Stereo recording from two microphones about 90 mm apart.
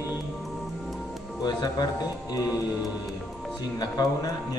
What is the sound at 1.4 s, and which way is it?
A man's voice, 50° left (ahead or behind).